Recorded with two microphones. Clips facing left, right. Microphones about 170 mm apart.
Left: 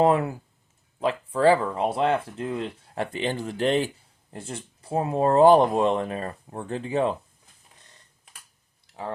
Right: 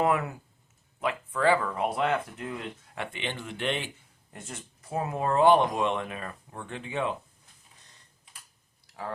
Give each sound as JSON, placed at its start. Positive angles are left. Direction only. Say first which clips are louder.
{"t": 0.0, "sound": "speech", "louder": "left 6 dB", "side_deg": 30}
{"t": 8.9, "sound": "clicking", "louder": "left 3 dB", "side_deg": 25}